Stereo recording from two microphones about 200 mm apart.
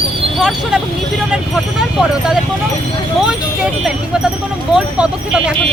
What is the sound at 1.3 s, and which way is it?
Vehicle, centre (ahead or behind).